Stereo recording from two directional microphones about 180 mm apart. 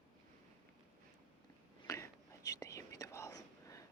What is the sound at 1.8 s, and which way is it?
Whispering, 15° left (ahead or behind).